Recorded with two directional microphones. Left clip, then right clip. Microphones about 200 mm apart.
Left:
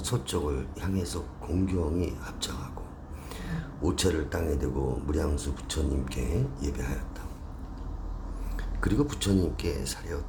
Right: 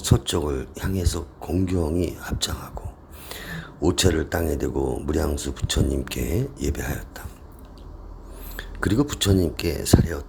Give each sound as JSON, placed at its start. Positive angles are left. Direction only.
{"t": 0.0, "sound": "speech", "side_deg": -35}
{"t": 8.5, "sound": "speech", "side_deg": -35}